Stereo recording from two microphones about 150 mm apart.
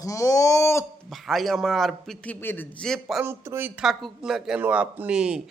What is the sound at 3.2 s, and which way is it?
Speech, 15° right (ahead or behind).